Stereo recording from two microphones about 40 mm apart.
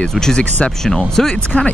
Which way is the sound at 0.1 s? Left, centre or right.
Centre.